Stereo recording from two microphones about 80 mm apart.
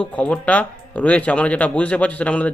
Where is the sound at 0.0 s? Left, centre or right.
Centre.